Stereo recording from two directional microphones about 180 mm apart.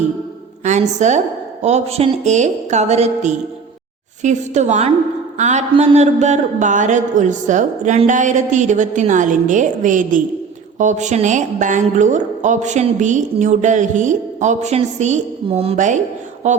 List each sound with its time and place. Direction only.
0.6 s a woman's voice: 40° right (ahead or behind)